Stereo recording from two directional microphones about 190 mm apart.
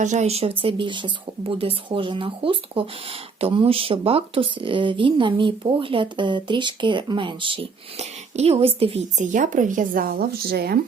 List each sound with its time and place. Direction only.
0.0 s speech: 40° right (ahead or behind)
9.3 s speech: 45° right (ahead or behind)